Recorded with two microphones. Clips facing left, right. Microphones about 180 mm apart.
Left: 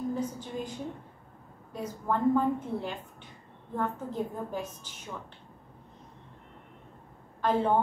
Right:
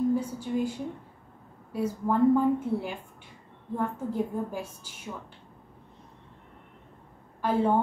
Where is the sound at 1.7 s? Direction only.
10° right (ahead or behind).